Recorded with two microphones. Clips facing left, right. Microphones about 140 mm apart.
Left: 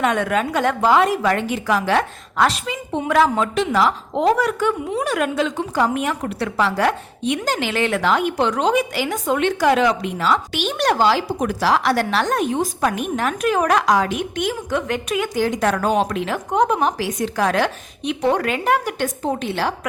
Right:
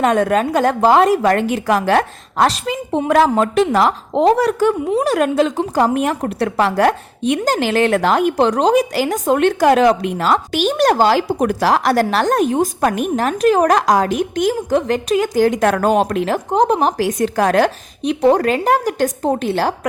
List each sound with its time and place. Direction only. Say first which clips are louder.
0.0 s a woman's voice: right 5 dB; 40° right (ahead or behind)
4.1 s a woman's voice: right 4 dB; 35° right (ahead or behind)
15.4 s a woman's voice: right 5 dB; 50° right (ahead or behind)
16.5 s a woman's voice: right 2 dB; 35° right (ahead or behind)